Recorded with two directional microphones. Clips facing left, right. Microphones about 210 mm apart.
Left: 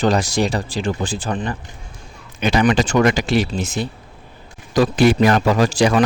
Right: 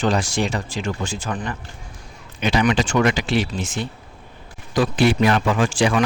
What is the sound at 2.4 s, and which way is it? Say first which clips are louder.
A man's voice: left 3 dB; 45° left (ahead or behind).